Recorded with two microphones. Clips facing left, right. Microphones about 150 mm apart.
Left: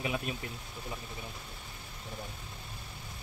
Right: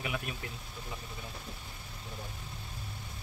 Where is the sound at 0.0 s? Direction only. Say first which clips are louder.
Left 3 dB; 25° left (ahead or behind).